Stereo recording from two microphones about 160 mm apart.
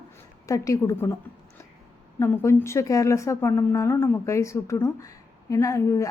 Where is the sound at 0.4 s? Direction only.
20° left (ahead or behind).